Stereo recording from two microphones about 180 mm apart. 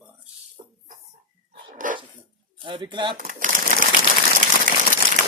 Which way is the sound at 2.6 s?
25° right (ahead or behind).